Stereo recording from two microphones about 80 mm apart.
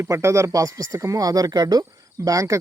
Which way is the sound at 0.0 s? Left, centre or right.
Right.